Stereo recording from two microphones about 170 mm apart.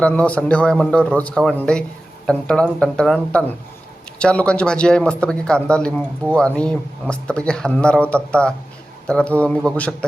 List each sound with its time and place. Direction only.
0.0 s a man's voice: 5° left (ahead or behind)